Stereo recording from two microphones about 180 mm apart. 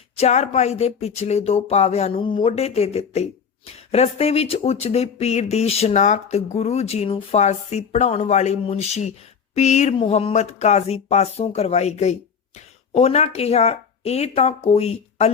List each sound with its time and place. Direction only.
0.2 s speech: 40° left (ahead or behind)